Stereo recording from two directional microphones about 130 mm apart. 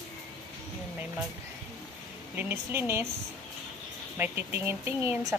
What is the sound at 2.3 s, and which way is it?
Speech, 15° right (ahead or behind).